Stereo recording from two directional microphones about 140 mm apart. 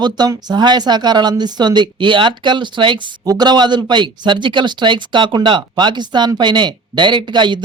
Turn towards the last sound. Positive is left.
turn(degrees=-35)  # may be behind; listen again after turning